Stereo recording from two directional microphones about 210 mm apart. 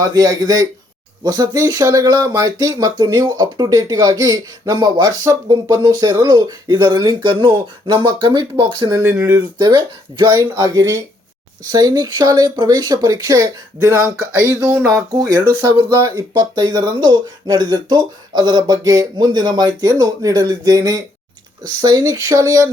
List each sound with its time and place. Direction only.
0.0 s speech: 15° right (ahead or behind)